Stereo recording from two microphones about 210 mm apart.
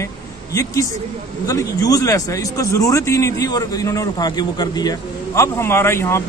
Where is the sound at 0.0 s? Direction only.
15° left (ahead or behind).